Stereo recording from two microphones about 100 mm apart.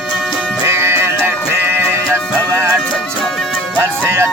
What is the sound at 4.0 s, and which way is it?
Music, 25° right (ahead or behind).